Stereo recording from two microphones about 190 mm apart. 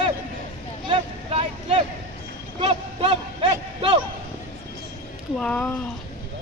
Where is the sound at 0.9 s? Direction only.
30° right (ahead or behind).